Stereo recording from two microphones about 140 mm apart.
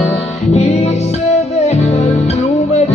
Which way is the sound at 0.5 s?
50° left (ahead or behind).